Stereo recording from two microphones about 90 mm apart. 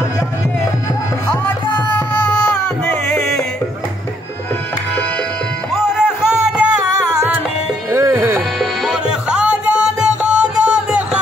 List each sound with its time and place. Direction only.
2.8 s music: 15° left (ahead or behind)
5.9 s music: 5° right (ahead or behind)
7.9 s music: 25° right (ahead or behind)
8.5 s music: centre (ahead or behind)
9.5 s music: 10° right (ahead or behind)